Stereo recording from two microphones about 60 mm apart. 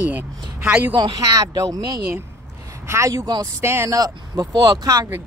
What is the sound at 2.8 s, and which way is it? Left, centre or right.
Speech, right.